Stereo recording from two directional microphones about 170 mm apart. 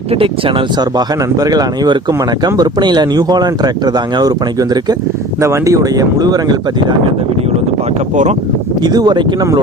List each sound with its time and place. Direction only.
0.1 s speech: 30° right (ahead or behind)
8.1 s speech: 45° right (ahead or behind)
8.8 s speech: 25° right (ahead or behind)